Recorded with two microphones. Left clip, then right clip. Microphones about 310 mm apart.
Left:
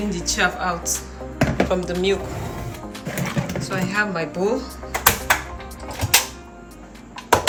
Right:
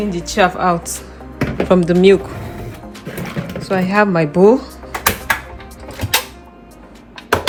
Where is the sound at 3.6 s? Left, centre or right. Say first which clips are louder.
Right 9 dB; centre.